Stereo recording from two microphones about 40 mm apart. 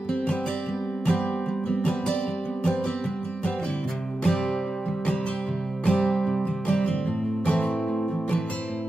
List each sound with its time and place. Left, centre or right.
1.6 s music: left
4.2 s music: centre
5.9 s music: centre